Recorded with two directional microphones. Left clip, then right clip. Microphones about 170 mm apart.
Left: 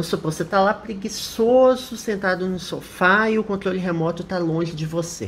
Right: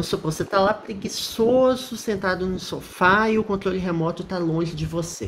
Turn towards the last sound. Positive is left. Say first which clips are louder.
# left 2 dB
turn(degrees=5)  # may be behind; listen again after turning